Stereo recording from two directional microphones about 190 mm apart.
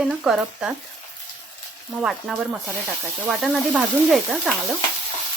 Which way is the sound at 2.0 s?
Centre (ahead or behind).